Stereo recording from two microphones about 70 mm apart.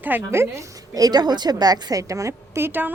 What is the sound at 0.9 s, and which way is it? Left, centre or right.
A woman's voice, right.